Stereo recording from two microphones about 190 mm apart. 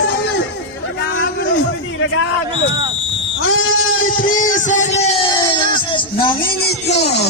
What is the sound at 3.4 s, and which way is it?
Sheep, 90° left.